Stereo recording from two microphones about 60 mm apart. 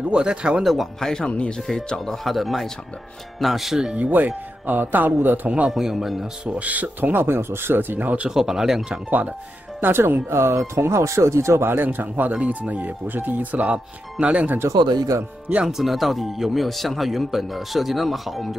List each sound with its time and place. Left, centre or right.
0.1 s speech: centre
1.0 s speech: centre
3.9 s speech: right
5.7 s speech: centre
6.4 s speech: right
8.3 s speech: centre
9.8 s speech: right
14.7 s speech: right
15.6 s speech: centre